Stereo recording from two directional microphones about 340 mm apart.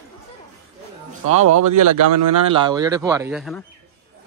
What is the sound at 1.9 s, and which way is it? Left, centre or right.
Speech, right.